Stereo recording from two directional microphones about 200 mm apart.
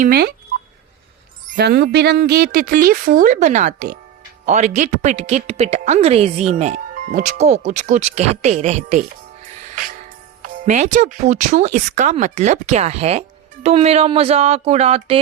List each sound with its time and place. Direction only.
0.0 s a woman's voice: 50° right (ahead or behind)
1.5 s a woman's voice: 55° right (ahead or behind); by 9.0 s 35° right (ahead or behind)
10.4 s speech: 40° right (ahead or behind)